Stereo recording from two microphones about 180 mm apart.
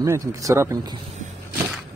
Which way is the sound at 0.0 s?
15° right (ahead or behind).